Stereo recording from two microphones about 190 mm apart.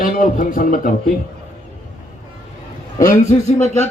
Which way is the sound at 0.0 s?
45° left (ahead or behind).